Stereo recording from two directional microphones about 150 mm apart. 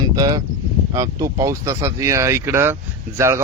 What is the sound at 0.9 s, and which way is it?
Speech, 20° right (ahead or behind).